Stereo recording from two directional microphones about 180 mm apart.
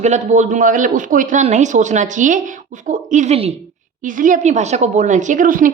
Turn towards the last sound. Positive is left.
turn(degrees=-50)  # may be behind; listen again after turning